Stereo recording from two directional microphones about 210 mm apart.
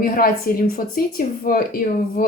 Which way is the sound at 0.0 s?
40° left (ahead or behind).